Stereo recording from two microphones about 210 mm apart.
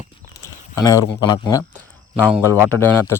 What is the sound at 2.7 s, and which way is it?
Speech, 10° left (ahead or behind).